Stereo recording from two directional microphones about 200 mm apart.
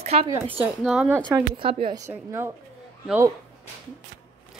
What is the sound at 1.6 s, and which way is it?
Speech, 25° right (ahead or behind).